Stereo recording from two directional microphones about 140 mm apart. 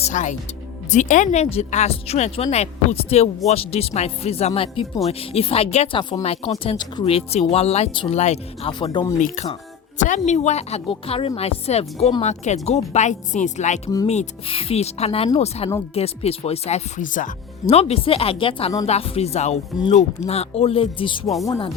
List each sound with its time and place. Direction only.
0.0 s speech: 60° left (ahead or behind)
8.8 s speech: 35° left (ahead or behind)
9.1 s speech: 60° left (ahead or behind)
17.7 s speech: 45° left (ahead or behind)